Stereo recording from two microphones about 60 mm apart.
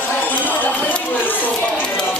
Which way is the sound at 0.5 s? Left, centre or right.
Left.